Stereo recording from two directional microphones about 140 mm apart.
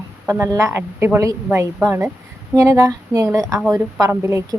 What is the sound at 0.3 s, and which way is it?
A woman's voice, 15° right (ahead or behind).